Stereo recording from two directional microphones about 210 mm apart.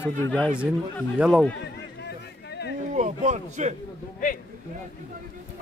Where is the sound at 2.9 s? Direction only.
35° right (ahead or behind).